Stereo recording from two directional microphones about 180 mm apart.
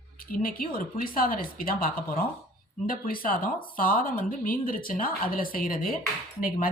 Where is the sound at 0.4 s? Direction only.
55° left (ahead or behind).